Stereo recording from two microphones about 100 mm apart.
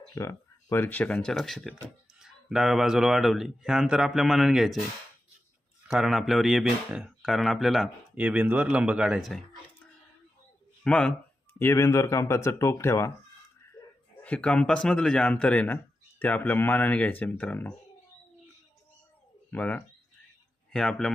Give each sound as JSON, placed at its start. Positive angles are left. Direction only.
{"t": 0.1, "sound": "a man's voice", "side_deg": 30}
{"t": 5.9, "sound": "speech", "side_deg": -5}
{"t": 8.1, "sound": "speech", "side_deg": -15}
{"t": 10.8, "sound": "a man's voice", "side_deg": 10}
{"t": 11.6, "sound": "speech", "side_deg": 25}
{"t": 14.3, "sound": "a man's voice", "side_deg": 15}
{"t": 19.5, "sound": "a man's voice", "side_deg": 15}
{"t": 20.7, "sound": "speech", "side_deg": 5}